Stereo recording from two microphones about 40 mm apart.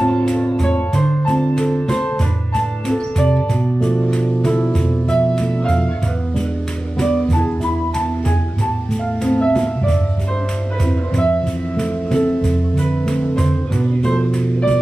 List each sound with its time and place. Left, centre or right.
0.2 s music: left
7.0 s music: centre
9.2 s music: left
11.1 s music: left
12.4 s music: centre